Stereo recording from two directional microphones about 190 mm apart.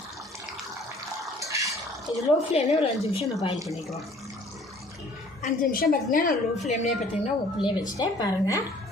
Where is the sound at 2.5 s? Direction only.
35° left (ahead or behind).